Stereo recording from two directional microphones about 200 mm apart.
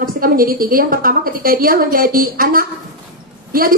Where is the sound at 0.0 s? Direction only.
45° right (ahead or behind).